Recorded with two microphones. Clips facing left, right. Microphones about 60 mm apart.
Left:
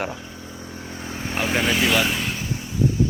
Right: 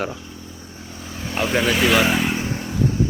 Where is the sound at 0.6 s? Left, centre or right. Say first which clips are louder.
Left 3 dB; left.